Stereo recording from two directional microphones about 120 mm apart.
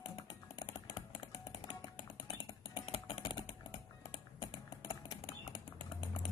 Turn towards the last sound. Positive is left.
turn(degrees=45)  # may be behind; listen again after turning